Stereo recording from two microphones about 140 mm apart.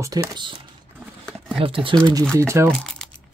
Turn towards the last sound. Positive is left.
turn(degrees=0)  # may be behind; listen again after turning